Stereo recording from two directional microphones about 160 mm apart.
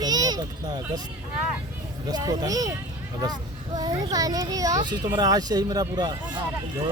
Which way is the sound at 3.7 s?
25° right (ahead or behind).